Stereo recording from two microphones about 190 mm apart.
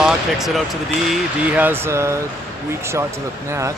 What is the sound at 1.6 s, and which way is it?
Speech, 10° right (ahead or behind).